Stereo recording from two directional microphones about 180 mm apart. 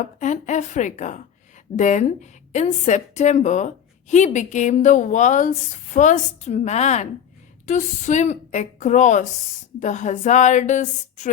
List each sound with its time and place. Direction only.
0.0 s a woman's voice: 40° left (ahead or behind)